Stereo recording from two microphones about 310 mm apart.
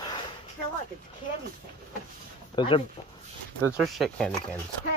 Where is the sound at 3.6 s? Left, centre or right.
Centre.